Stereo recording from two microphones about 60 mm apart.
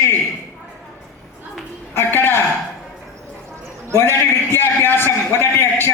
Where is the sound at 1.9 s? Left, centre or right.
Left.